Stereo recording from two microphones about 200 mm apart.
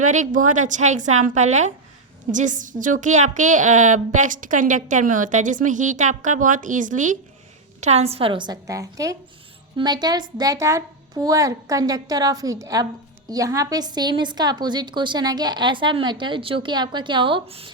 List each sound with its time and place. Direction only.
0.0 s a woman's voice: 40° right (ahead or behind)